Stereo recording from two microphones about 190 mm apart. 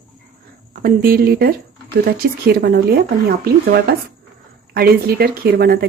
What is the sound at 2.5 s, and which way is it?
Speech, 55° right (ahead or behind).